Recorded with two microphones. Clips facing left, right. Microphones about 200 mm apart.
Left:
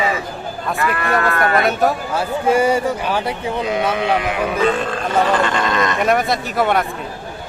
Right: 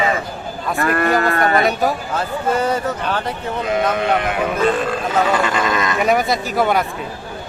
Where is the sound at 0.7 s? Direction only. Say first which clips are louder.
Right 3 dB; 45° right (ahead or behind).